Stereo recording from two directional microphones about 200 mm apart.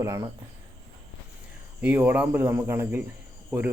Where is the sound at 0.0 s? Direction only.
15° right (ahead or behind).